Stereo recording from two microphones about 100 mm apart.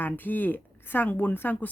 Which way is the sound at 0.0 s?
20° left (ahead or behind).